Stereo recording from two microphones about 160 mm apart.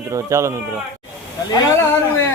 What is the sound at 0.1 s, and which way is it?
Speech, 20° right (ahead or behind).